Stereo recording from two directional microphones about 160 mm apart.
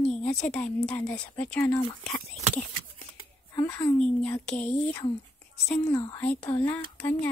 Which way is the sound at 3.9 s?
10° left (ahead or behind).